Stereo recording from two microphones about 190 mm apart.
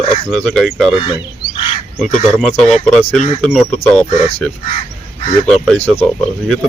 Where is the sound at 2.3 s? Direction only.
Centre (ahead or behind).